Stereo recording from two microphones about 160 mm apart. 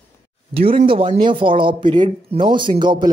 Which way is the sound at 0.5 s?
35° right (ahead or behind).